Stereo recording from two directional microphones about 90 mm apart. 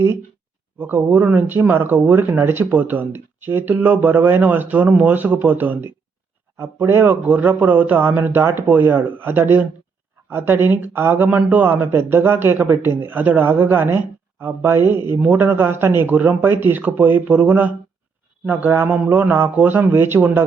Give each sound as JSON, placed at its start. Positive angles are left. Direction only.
{"t": 0.8, "sound": "speech", "side_deg": -25}